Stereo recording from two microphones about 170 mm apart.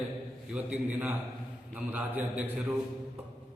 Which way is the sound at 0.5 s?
10° right (ahead or behind).